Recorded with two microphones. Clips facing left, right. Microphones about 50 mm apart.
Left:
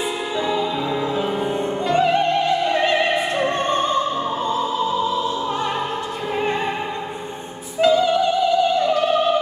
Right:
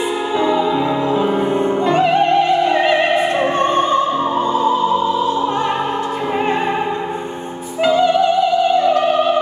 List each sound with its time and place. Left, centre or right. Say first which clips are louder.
0.4 s music: right 6 dB; centre
3.5 s opera: right 5 dB; centre
7.8 s music: right 2 dB; centre